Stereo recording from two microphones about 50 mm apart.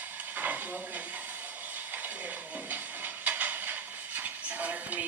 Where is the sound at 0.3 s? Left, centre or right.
Right.